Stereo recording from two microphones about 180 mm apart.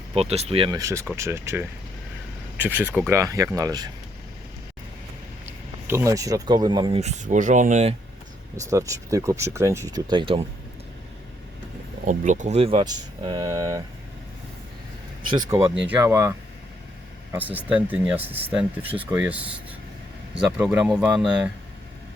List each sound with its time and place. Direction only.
0.1 s speech: 35° right (ahead or behind)
0.8 s speech: 15° right (ahead or behind)
5.5 s speech: 15° right (ahead or behind)
7.0 s speech: 45° right (ahead or behind)
8.5 s speech: 20° right (ahead or behind)
12.0 s speech: 45° right (ahead or behind); by 13.8 s 20° right (ahead or behind)
15.3 s speech: 20° right (ahead or behind)
17.3 s speech: 10° right (ahead or behind)